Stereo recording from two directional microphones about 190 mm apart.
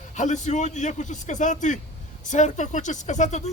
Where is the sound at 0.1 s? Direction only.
40° left (ahead or behind).